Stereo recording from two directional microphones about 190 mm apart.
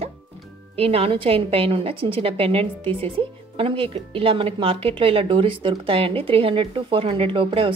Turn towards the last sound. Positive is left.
turn(degrees=-25)  # may be behind; listen again after turning